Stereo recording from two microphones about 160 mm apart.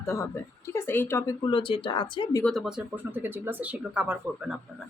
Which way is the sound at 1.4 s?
30° left (ahead or behind).